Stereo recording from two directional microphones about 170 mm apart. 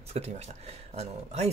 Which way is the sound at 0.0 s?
40° right (ahead or behind).